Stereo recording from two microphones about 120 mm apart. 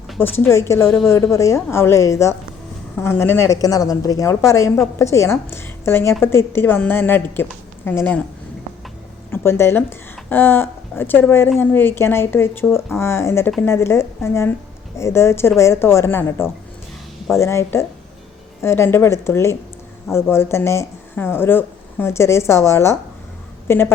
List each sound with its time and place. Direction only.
0.2 s speech: 20° left (ahead or behind)
9.3 s a woman's voice: 20° left (ahead or behind)